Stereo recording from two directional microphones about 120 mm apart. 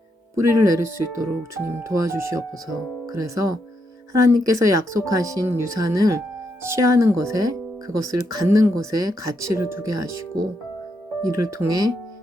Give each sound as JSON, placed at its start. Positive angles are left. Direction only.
{"t": 0.4, "sound": "speech", "side_deg": -30}
{"t": 11.3, "sound": "speech", "side_deg": -25}